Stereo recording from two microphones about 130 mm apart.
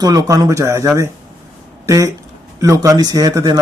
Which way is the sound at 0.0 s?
30° right (ahead or behind).